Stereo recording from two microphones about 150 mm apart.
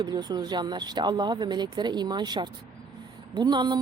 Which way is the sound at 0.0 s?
25° right (ahead or behind).